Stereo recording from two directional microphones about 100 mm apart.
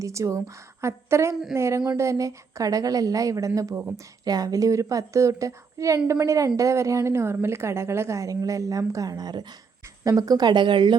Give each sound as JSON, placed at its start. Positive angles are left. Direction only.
{"t": 0.0, "sound": "a woman's voice", "side_deg": -30}